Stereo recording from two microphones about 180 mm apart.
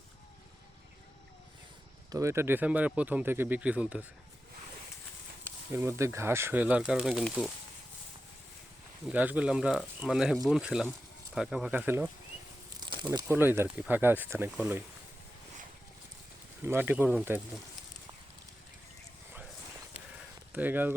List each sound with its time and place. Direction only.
2.0 s speech: 15° right (ahead or behind)
5.7 s speech: 15° right (ahead or behind)
9.0 s speech: 5° right (ahead or behind)
12.8 s a sound: 25° right (ahead or behind)
13.1 s speech: 15° right (ahead or behind)
16.6 s speech: 10° right (ahead or behind)
20.5 s speech: 10° right (ahead or behind)